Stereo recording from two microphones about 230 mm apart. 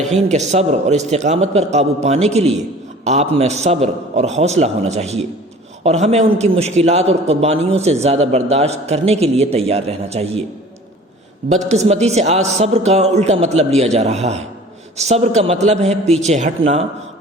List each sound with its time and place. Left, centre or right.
0.0 s a man's voice: right
11.4 s a man's voice: right